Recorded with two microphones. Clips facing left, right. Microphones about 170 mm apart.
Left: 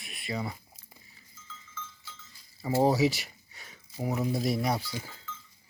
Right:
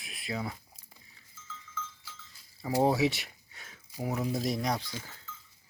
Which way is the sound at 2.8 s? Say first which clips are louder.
Left 2 dB; centre (ahead or behind).